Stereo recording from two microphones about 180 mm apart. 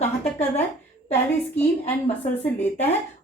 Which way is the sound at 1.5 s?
10° left (ahead or behind).